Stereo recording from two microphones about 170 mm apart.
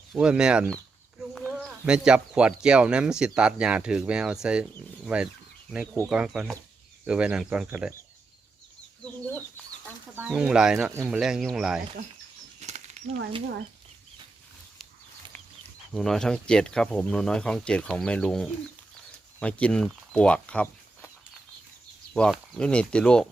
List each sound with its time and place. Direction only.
0.1 s speech: 5° right (ahead or behind)
1.4 s a sound: 5° left (ahead or behind)
1.9 s speech: 5° right (ahead or behind)
10.2 s speech: 5° right (ahead or behind)
12.5 s a sound: 40° right (ahead or behind)
16.0 s speech: 5° left (ahead or behind)
22.1 s speech: 5° left (ahead or behind)